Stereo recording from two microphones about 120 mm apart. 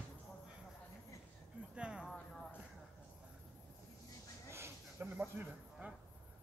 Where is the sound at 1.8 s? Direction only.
10° right (ahead or behind).